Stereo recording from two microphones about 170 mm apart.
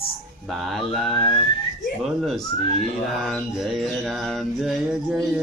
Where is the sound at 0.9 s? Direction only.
Centre (ahead or behind).